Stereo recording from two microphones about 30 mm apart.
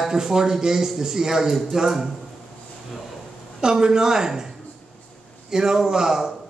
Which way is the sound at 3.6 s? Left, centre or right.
Right.